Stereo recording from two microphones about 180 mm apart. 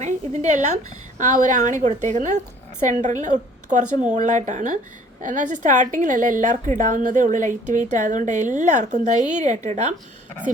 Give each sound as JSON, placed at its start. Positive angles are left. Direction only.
{"t": 0.0, "sound": "a woman's voice", "side_deg": -40}